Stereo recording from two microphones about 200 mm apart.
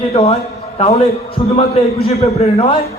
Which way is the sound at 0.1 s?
30° left (ahead or behind).